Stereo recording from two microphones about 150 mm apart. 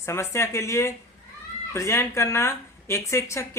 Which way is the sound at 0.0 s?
20° left (ahead or behind).